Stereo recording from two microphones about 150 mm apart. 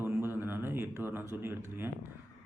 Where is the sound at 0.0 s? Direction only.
15° right (ahead or behind).